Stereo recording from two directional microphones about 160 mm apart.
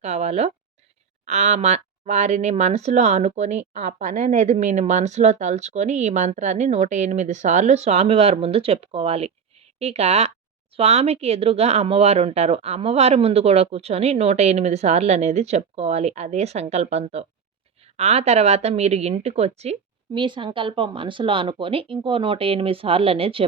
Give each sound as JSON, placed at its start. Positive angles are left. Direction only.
{"t": 0.0, "sound": "speech", "side_deg": -40}
{"t": 20.1, "sound": "speech", "side_deg": -30}